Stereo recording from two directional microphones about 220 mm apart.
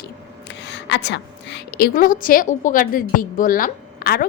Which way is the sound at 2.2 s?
40° left (ahead or behind).